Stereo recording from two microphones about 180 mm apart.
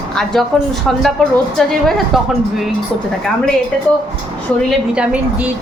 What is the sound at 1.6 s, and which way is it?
Speech, centre (ahead or behind).